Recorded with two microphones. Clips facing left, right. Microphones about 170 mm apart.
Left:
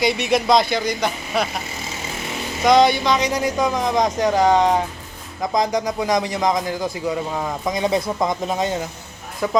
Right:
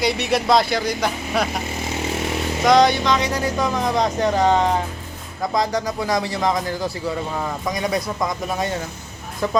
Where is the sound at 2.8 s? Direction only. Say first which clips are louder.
Left 1 dB; 15° left (ahead or behind).